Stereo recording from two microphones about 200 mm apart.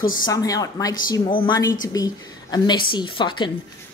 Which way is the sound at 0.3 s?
15° left (ahead or behind).